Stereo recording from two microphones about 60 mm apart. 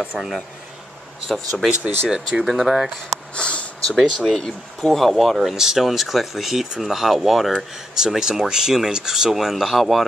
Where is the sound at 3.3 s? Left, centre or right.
Centre.